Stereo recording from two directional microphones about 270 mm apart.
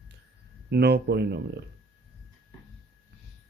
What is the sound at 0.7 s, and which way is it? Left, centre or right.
Speech, right.